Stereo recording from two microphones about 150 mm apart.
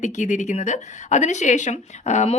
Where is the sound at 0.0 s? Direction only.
55° left (ahead or behind).